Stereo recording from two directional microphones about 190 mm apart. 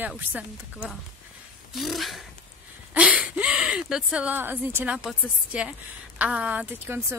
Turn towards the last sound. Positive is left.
turn(degrees=-10)  # may be behind; listen again after turning